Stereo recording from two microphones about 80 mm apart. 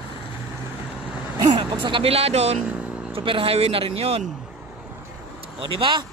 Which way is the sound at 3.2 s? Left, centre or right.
Right.